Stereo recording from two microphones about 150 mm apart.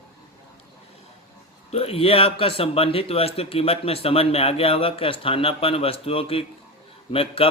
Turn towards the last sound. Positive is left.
turn(degrees=40)  # may be behind; listen again after turning